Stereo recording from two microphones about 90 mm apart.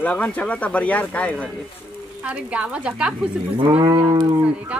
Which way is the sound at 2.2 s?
15° right (ahead or behind).